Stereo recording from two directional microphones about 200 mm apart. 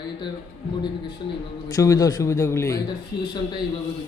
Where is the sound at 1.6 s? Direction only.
15° left (ahead or behind).